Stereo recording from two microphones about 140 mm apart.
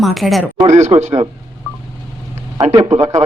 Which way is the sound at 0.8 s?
50° right (ahead or behind).